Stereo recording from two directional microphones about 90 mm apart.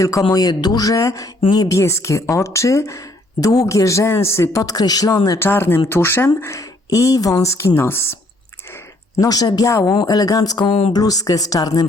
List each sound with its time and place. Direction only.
0.0 s speech: 40° left (ahead or behind)
4.6 s speech: 45° left (ahead or behind)
5.4 s speech: 25° left (ahead or behind)
9.2 s speech: 45° left (ahead or behind)